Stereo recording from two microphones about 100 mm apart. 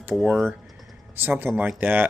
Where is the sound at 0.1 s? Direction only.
10° right (ahead or behind).